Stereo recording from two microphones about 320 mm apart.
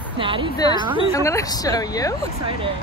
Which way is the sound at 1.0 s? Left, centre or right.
Centre.